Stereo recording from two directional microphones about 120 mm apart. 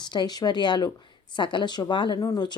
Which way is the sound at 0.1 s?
35° left (ahead or behind).